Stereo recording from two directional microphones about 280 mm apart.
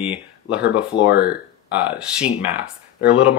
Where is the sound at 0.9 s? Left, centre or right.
Left.